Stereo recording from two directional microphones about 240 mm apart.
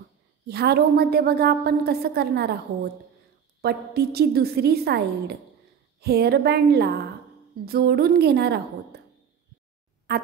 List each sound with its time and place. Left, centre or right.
0.5 s a woman's voice: right